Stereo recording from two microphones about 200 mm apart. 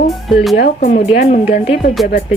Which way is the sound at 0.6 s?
40° left (ahead or behind).